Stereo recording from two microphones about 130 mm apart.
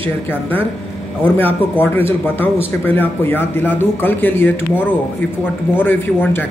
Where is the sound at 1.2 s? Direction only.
15° left (ahead or behind).